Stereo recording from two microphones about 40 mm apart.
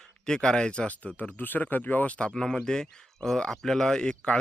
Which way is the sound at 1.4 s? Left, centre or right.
Left.